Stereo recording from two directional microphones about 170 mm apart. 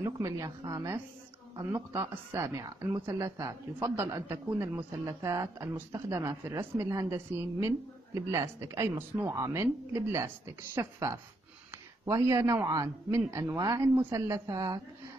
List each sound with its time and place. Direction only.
0.0 s a man's voice: 20° right (ahead or behind)